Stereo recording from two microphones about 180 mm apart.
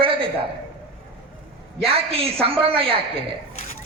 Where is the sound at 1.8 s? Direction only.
30° right (ahead or behind).